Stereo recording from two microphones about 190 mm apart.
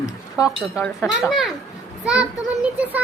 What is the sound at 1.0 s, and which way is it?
A child's voice, centre (ahead or behind).